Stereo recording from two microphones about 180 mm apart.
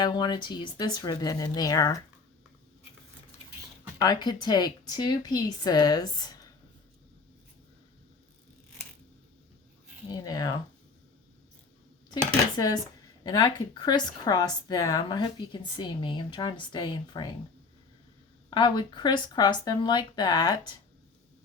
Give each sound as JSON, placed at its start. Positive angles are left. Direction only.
{"t": 0.0, "sound": "a woman's voice", "side_deg": 25}
{"t": 4.0, "sound": "a woman's voice", "side_deg": 20}
{"t": 10.1, "sound": "a woman's voice", "side_deg": 20}
{"t": 12.5, "sound": "a woman's voice", "side_deg": 20}
{"t": 18.5, "sound": "a woman's voice", "side_deg": 25}